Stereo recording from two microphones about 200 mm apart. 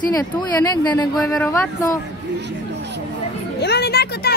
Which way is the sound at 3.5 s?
55° left (ahead or behind).